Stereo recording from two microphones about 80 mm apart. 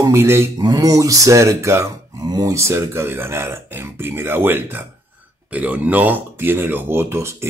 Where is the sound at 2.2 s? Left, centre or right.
Right.